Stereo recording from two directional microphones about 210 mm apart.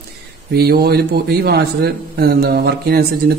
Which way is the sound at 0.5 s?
50° right (ahead or behind).